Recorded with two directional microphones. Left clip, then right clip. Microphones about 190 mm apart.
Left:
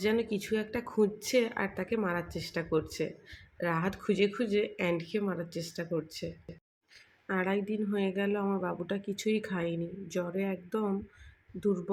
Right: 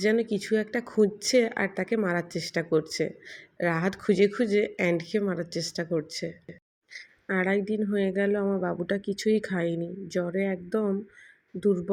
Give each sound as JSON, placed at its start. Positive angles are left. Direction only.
{"t": 0.0, "sound": "speech", "side_deg": -15}